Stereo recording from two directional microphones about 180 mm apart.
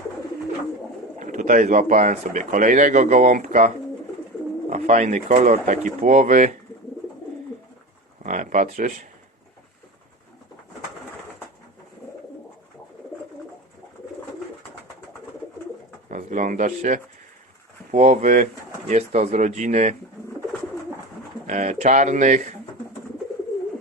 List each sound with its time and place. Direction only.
1.2 s speech: 45° right (ahead or behind)
4.7 s speech: 40° right (ahead or behind)
8.2 s speech: 45° right (ahead or behind)
16.0 s a sound: 45° right (ahead or behind)
17.9 s speech: 40° right (ahead or behind)
21.4 s speech: 40° right (ahead or behind)